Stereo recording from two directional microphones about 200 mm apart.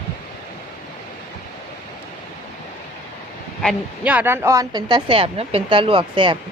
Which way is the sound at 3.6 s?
5° right (ahead or behind).